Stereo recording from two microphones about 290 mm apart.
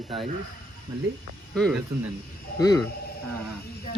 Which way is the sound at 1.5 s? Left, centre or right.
Centre.